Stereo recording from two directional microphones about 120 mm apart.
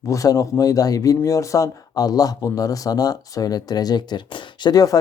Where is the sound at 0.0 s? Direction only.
30° left (ahead or behind).